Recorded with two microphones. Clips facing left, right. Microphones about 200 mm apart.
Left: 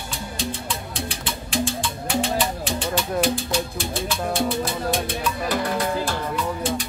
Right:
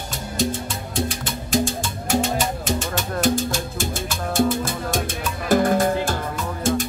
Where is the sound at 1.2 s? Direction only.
45° right (ahead or behind).